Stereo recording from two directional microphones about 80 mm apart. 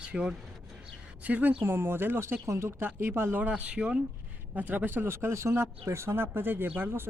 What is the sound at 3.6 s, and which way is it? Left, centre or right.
Speech, centre.